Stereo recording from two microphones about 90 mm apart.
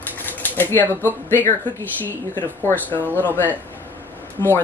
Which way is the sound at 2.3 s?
20° left (ahead or behind).